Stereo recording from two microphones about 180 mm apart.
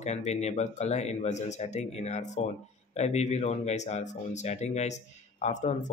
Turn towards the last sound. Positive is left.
turn(degrees=40)  # may be behind; listen again after turning